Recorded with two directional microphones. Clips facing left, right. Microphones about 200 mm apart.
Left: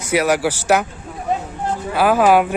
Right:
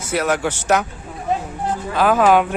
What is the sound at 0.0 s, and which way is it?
Speech, 10° left (ahead or behind).